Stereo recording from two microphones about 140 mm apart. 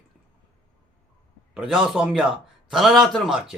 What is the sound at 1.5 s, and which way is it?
Speech, 5° right (ahead or behind).